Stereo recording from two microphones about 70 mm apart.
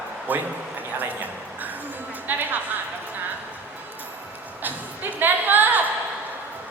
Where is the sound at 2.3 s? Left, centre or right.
Right.